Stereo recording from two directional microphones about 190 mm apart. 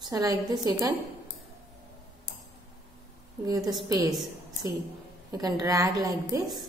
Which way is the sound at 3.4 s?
20° right (ahead or behind).